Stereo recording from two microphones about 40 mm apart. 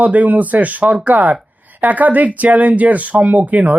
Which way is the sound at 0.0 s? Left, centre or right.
Right.